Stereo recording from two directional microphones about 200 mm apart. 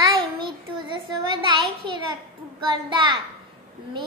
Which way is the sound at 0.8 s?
25° right (ahead or behind).